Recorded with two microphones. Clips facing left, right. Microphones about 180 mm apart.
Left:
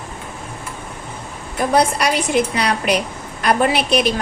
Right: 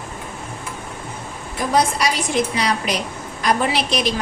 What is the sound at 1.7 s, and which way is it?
A woman's voice, 60° left (ahead or behind).